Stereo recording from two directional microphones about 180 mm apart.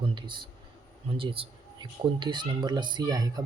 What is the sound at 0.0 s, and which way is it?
Speech, 25° right (ahead or behind).